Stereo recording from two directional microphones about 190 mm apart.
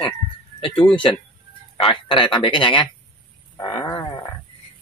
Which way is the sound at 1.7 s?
25° left (ahead or behind).